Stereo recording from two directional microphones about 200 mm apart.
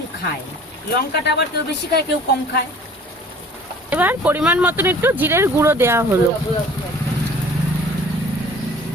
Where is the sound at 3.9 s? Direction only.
10° right (ahead or behind).